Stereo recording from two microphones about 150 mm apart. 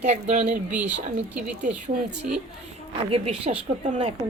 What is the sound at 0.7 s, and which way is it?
Speech, 10° right (ahead or behind).